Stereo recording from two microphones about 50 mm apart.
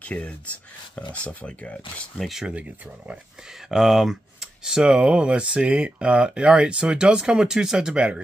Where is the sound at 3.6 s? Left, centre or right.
Centre.